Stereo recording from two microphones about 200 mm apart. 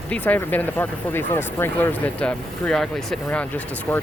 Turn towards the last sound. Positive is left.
turn(degrees=10)  # may be behind; listen again after turning